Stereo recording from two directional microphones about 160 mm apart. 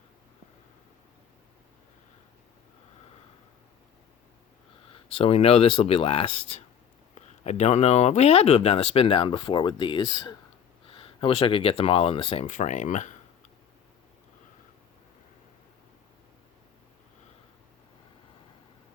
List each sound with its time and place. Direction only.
4.9 s speech: 35° left (ahead or behind)
12.5 s speech: 50° left (ahead or behind)